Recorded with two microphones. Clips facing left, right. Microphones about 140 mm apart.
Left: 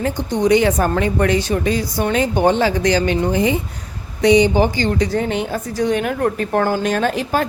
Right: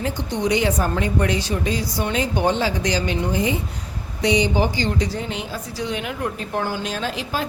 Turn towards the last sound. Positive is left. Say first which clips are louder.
# left 8 dB
turn(degrees=50)  # may be behind; listen again after turning